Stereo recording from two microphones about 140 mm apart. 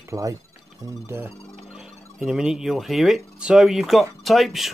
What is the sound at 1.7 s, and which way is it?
Speech, 5° right (ahead or behind).